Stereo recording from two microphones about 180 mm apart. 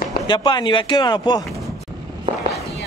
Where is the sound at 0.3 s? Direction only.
25° left (ahead or behind).